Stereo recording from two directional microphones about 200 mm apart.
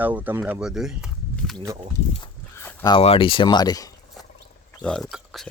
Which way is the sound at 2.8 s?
25° left (ahead or behind).